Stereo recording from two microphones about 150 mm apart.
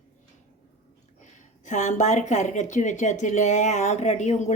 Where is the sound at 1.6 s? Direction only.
55° left (ahead or behind).